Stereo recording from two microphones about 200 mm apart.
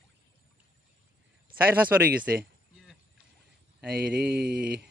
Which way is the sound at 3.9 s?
55° right (ahead or behind).